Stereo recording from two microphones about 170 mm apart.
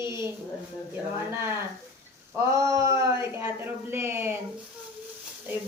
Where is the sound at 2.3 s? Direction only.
20° right (ahead or behind).